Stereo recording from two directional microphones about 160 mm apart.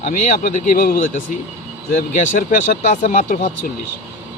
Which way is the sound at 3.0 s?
55° left (ahead or behind).